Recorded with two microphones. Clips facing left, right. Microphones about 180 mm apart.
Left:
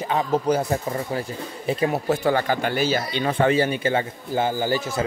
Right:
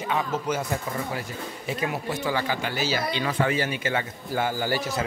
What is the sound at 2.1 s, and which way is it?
Speech, 55° left (ahead or behind).